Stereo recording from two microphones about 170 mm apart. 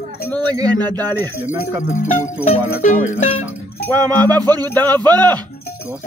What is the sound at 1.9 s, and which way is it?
Speech, 45° left (ahead or behind).